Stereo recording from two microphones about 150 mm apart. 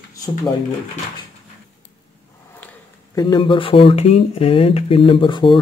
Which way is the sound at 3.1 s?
30° left (ahead or behind).